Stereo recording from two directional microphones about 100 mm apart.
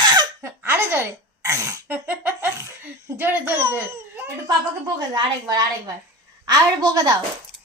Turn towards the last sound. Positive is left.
turn(degrees=-40)  # may be behind; listen again after turning